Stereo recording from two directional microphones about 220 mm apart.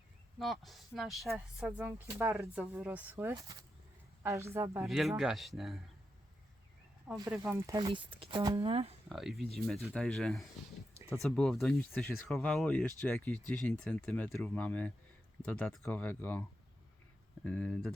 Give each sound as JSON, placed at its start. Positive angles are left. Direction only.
{"t": 0.3, "sound": "speech", "side_deg": 0}
{"t": 4.8, "sound": "speech", "side_deg": 0}
{"t": 7.1, "sound": "speech", "side_deg": -5}
{"t": 7.9, "sound": "speech", "side_deg": -25}
{"t": 9.0, "sound": "speech", "side_deg": 0}
{"t": 17.4, "sound": "speech", "side_deg": 5}